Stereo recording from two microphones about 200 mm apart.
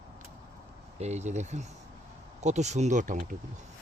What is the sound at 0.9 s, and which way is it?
Speech, 35° right (ahead or behind).